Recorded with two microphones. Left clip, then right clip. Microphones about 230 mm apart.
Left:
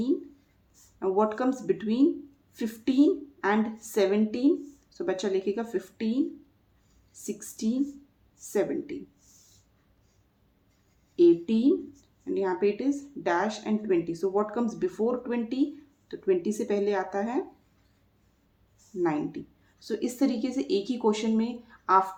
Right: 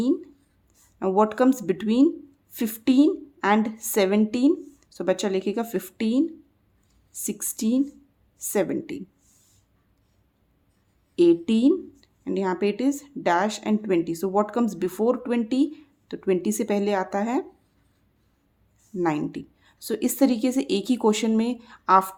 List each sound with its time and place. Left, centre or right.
0.9 s speech: right
11.1 s speech: right
18.9 s speech: right